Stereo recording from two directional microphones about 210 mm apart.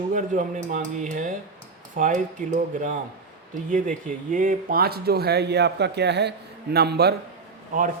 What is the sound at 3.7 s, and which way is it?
Speech, 40° right (ahead or behind).